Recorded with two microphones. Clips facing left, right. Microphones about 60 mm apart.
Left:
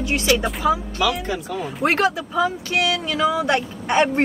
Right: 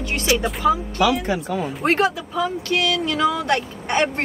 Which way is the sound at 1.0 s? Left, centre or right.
Centre.